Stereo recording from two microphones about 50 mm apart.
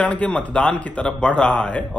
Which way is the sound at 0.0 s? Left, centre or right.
Left.